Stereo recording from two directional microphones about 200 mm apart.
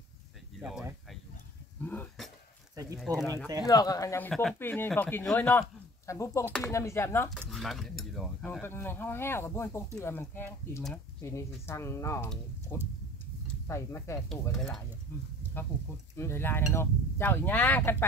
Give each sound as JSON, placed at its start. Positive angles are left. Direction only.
{"t": 0.6, "sound": "speech", "side_deg": -5}
{"t": 1.8, "sound": "a sound", "side_deg": 10}
{"t": 2.7, "sound": "a sound", "side_deg": -15}
{"t": 3.6, "sound": "speech", "side_deg": 20}
{"t": 4.3, "sound": "speech", "side_deg": 5}
{"t": 7.4, "sound": "speech", "side_deg": 0}
{"t": 14.5, "sound": "speech", "side_deg": 0}
{"t": 16.2, "sound": "speech", "side_deg": 10}